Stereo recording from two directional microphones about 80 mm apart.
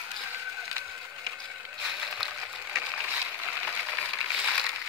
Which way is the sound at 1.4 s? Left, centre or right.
Centre.